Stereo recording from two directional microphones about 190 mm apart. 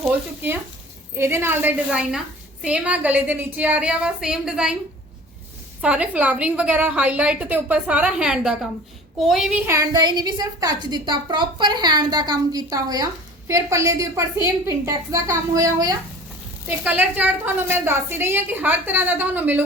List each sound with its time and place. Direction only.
0.0 s a woman's voice: 10° right (ahead or behind)
5.8 s a woman's voice: 5° right (ahead or behind)